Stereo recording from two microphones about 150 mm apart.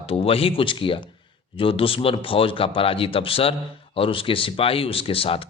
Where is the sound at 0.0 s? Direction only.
40° left (ahead or behind).